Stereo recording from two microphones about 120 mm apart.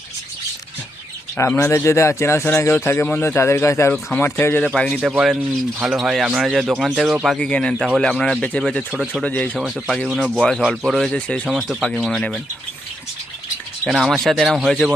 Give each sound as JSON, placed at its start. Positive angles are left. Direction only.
{"t": 1.4, "sound": "speech", "side_deg": 20}
{"t": 4.6, "sound": "speech", "side_deg": 5}
{"t": 7.3, "sound": "speech", "side_deg": 10}
{"t": 8.9, "sound": "speech", "side_deg": -5}
{"t": 9.2, "sound": "speech", "side_deg": 10}
{"t": 9.6, "sound": "speech", "side_deg": 0}
{"t": 11.4, "sound": "speech", "side_deg": 0}
{"t": 13.8, "sound": "speech", "side_deg": 0}